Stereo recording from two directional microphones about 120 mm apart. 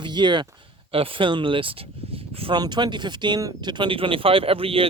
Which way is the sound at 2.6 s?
35° right (ahead or behind).